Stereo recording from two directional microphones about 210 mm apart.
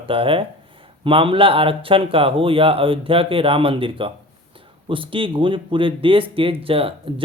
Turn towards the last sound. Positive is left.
turn(degrees=-25)  # may be behind; listen again after turning